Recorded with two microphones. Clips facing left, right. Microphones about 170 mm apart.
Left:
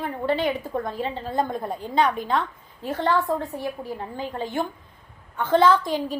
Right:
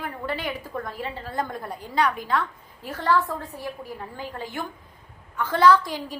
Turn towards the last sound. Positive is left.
turn(degrees=20)  # may be behind; listen again after turning